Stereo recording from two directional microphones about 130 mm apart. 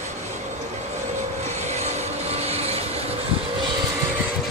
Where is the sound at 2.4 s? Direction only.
55° right (ahead or behind).